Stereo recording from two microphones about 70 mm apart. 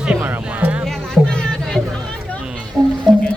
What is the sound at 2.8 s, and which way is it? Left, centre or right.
Music, right.